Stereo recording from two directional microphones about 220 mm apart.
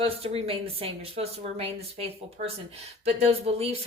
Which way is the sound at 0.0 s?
25° right (ahead or behind).